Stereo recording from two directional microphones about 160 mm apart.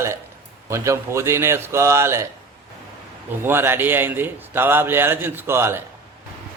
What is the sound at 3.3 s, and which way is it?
A man's voice, 15° right (ahead or behind).